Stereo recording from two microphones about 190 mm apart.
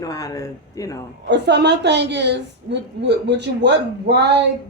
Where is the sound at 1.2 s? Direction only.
65° right (ahead or behind).